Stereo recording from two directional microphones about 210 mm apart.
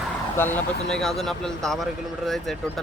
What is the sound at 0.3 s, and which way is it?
Speech, 10° left (ahead or behind).